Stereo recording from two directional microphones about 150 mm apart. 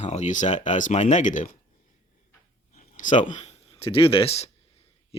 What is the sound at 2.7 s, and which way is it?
Speech, 60° left (ahead or behind).